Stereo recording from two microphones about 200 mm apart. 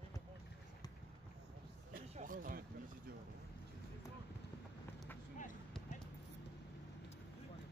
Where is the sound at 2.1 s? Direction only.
40° right (ahead or behind).